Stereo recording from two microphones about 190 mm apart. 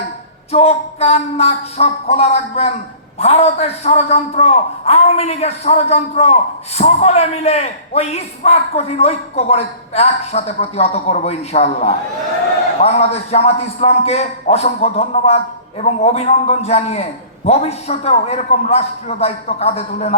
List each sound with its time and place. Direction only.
0.5 s a man's voice: 35° left (ahead or behind)